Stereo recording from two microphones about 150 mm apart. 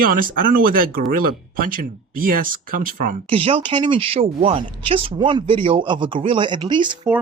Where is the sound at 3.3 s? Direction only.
40° right (ahead or behind).